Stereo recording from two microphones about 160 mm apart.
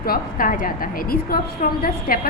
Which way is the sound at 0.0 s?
65° left (ahead or behind).